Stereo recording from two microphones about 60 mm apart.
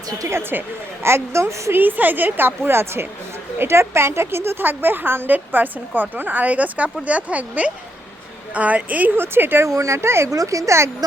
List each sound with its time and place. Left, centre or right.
0.3 s speech: right
1.7 s a woman's voice: right
9.6 s speech: right
10.3 s speech: right